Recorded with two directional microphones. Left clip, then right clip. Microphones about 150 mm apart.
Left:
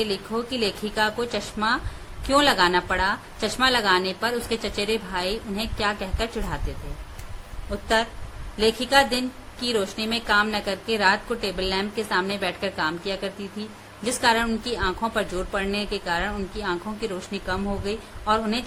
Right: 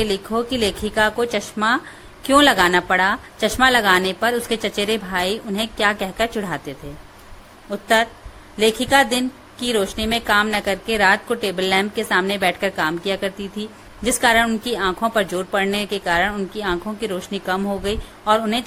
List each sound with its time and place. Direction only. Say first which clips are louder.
0.0 s a woman's voice: right 5 dB; 50° right (ahead or behind)
7.7 s a woman's voice: right 6 dB; 50° right (ahead or behind)